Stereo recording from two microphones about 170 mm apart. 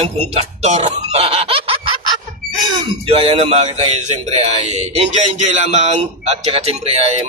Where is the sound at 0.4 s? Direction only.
40° right (ahead or behind).